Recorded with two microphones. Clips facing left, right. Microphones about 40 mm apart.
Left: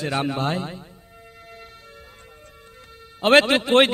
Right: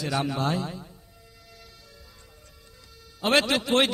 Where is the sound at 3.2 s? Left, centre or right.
Left.